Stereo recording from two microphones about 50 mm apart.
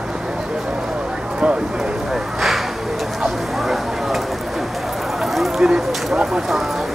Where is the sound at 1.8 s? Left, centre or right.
Centre.